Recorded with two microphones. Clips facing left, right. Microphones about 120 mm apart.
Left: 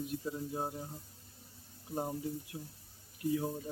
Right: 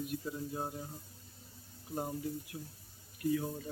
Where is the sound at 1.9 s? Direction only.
25° left (ahead or behind).